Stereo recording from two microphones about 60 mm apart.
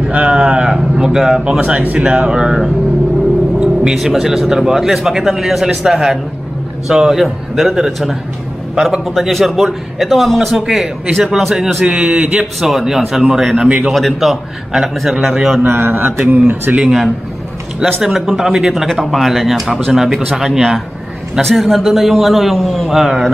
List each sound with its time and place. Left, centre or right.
0.1 s a man's voice: centre
3.5 s a sound: centre
3.9 s a man's voice: centre
13.7 s a man's voice: right
13.9 s speech: centre
15.5 s speech: right
18.0 s a man's voice: centre
21.4 s speech: centre